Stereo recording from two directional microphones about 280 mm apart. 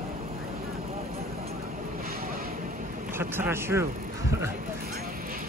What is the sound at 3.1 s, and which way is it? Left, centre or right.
Speech, centre.